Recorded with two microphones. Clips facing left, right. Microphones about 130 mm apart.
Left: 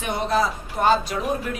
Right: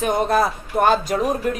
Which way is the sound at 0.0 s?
45° right (ahead or behind).